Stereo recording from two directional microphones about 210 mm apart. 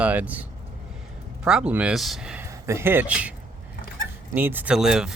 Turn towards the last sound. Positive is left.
turn(degrees=-5)  # may be behind; listen again after turning